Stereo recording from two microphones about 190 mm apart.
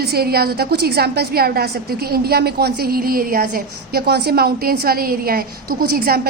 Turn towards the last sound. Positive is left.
turn(degrees=-55)  # may be behind; listen again after turning